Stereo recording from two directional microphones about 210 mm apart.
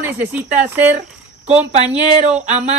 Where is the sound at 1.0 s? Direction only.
30° right (ahead or behind).